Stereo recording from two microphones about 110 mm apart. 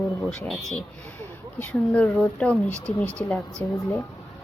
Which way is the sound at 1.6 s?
10° left (ahead or behind).